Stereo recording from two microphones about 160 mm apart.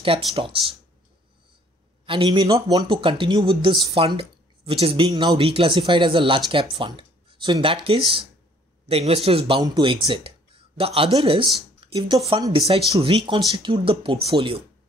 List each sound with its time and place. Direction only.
0.3 s speech: 35° right (ahead or behind)
2.0 s a man's voice: 30° right (ahead or behind)